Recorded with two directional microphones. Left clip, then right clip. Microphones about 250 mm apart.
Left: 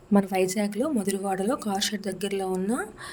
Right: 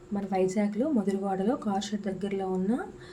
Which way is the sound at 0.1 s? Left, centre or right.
Left.